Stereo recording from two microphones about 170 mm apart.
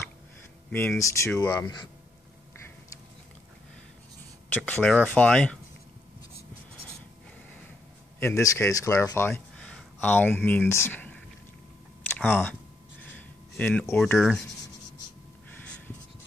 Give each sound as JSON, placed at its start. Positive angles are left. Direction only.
{"t": 0.7, "sound": "speech", "side_deg": 10}
{"t": 4.6, "sound": "speech", "side_deg": 5}
{"t": 8.2, "sound": "speech", "side_deg": 15}
{"t": 12.2, "sound": "speech", "side_deg": 10}
{"t": 13.0, "sound": "a sound", "side_deg": 10}
{"t": 14.1, "sound": "speech", "side_deg": 0}